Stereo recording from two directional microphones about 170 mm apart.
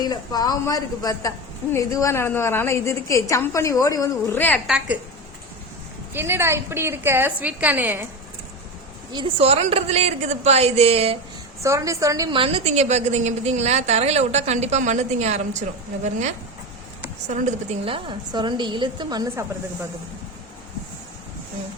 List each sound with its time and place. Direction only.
0.0 s a woman's voice: 25° left (ahead or behind)
4.6 s a woman's voice: 5° right (ahead or behind)
6.1 s a woman's voice: 15° right (ahead or behind)
9.1 s a woman's voice: 35° right (ahead or behind)
11.6 s a woman's voice: 20° right (ahead or behind); by 15.6 s 40° right (ahead or behind)
17.2 s a woman's voice: 45° right (ahead or behind); by 19.5 s 20° right (ahead or behind)